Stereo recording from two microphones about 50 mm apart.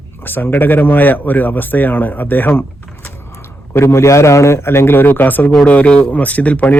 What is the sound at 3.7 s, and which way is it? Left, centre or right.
A man's voice, left.